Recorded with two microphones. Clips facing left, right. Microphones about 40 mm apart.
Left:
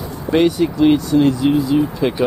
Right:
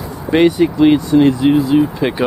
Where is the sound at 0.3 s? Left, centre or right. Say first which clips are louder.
Right 3 dB; centre.